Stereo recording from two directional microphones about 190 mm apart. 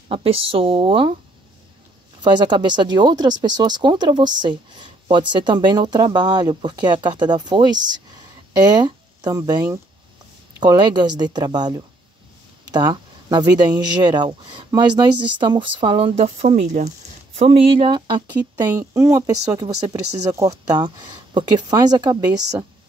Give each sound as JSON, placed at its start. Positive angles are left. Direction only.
{"t": 0.1, "sound": "speech", "side_deg": -30}
{"t": 2.2, "sound": "speech", "side_deg": -25}